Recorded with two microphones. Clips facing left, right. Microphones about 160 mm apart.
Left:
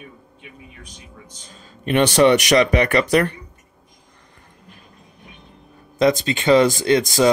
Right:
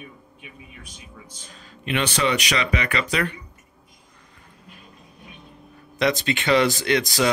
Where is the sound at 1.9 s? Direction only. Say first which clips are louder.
Left 9 dB; 50° left (ahead or behind).